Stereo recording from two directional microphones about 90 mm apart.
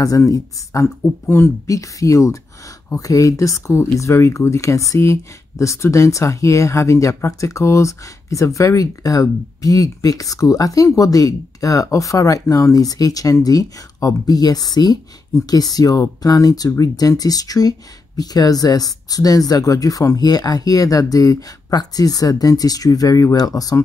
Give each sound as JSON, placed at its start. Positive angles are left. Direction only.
{"t": 0.0, "sound": "speech", "side_deg": 40}